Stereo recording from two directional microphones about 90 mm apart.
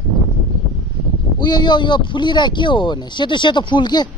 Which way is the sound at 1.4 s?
55° left (ahead or behind).